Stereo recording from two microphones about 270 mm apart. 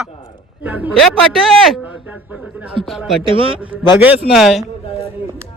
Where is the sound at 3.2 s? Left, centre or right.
Centre.